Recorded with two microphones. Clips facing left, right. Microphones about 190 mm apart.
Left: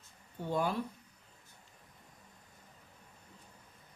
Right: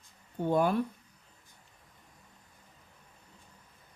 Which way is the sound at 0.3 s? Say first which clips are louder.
Right 6 dB; 55° right (ahead or behind).